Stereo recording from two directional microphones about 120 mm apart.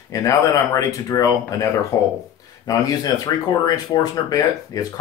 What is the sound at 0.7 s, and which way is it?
Speech, 30° left (ahead or behind).